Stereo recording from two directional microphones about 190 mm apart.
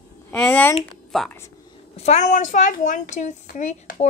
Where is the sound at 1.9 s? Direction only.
35° left (ahead or behind).